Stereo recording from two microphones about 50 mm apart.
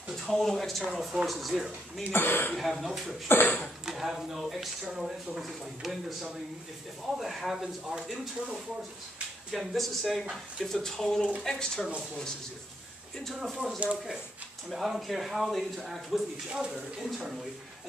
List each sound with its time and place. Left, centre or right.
0.1 s speech: centre
2.1 s speech: left
2.5 s speech: centre
3.3 s a sound: left
3.8 s speech: centre
13.8 s speech: right
14.7 s speech: centre